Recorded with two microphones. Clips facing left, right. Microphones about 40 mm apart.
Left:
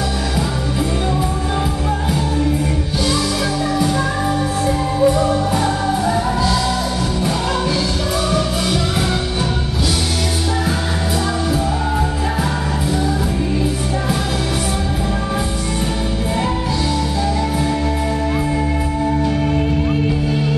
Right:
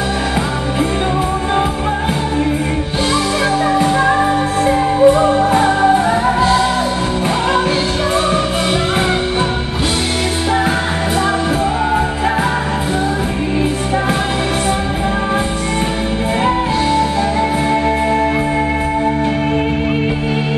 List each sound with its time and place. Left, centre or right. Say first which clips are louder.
3.7 s music: right 6 dB; right